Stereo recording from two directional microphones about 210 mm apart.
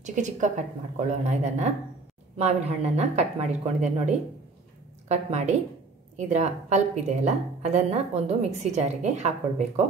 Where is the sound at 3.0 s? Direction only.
35° right (ahead or behind).